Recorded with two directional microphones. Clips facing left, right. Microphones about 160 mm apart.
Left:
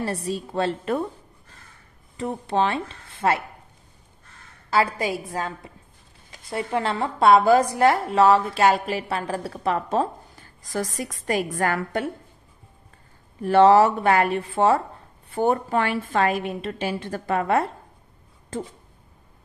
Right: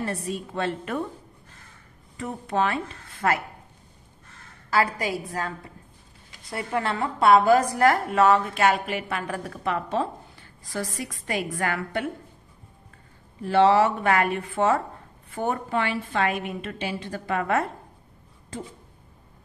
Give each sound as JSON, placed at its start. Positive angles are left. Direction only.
{"t": 0.0, "sound": "a woman's voice", "side_deg": 35}
{"t": 2.1, "sound": "speech", "side_deg": 30}
{"t": 4.6, "sound": "a woman's voice", "side_deg": 25}
{"t": 13.4, "sound": "a woman's voice", "side_deg": 50}
{"t": 15.8, "sound": "a woman's voice", "side_deg": 45}
{"t": 17.4, "sound": "a woman's voice", "side_deg": 30}